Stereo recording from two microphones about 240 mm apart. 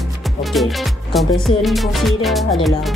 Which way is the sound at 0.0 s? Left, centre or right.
Centre.